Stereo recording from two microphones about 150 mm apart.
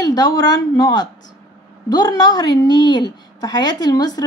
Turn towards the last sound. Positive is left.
turn(degrees=25)  # may be behind; listen again after turning